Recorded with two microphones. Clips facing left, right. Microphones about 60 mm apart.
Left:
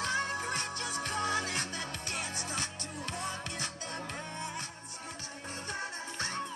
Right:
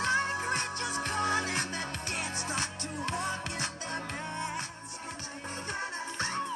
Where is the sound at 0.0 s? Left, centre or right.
Right.